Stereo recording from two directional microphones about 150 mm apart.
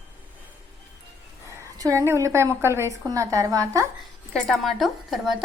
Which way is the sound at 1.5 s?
20° right (ahead or behind).